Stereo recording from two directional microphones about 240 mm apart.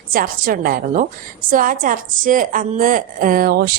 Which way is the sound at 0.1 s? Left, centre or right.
Right.